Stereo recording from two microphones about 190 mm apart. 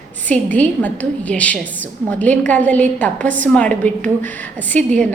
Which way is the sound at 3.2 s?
40° right (ahead or behind).